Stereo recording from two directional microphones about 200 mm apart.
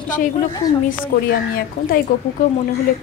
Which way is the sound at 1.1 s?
50° left (ahead or behind).